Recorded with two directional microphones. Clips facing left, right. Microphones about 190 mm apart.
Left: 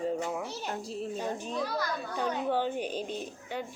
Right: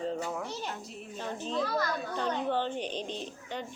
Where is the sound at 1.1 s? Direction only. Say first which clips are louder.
Right 3 dB; 10° left (ahead or behind).